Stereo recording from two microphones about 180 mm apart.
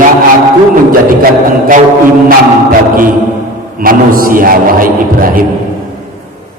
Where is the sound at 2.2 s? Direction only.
50° right (ahead or behind).